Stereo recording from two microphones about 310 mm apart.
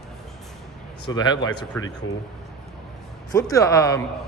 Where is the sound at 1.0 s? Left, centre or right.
Centre.